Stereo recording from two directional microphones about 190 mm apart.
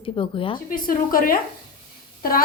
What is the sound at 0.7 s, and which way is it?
Speech, 50° left (ahead or behind).